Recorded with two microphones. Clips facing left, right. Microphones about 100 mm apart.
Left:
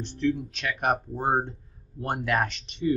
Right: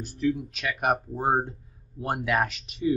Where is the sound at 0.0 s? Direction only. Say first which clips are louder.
Even; 5° right (ahead or behind).